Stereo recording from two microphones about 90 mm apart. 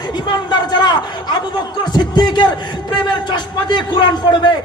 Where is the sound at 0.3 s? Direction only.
55° left (ahead or behind).